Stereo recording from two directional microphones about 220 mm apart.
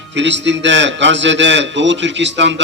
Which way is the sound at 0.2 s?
55° right (ahead or behind).